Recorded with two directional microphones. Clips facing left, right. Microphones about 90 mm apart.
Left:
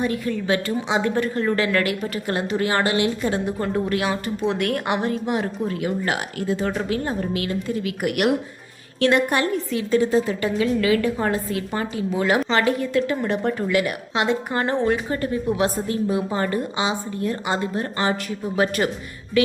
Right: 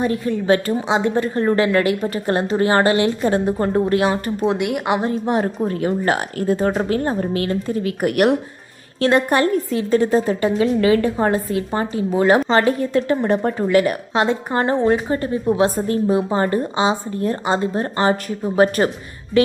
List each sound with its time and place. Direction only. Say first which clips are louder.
0.0 s a woman's voice: right 4 dB; 35° right (ahead or behind)
4.5 s a woman's voice: right 3 dB; 20° right (ahead or behind)
5.0 s a woman's voice: right 4 dB; 40° right (ahead or behind)
10.4 s a woman's voice: right 4 dB; 30° right (ahead or behind)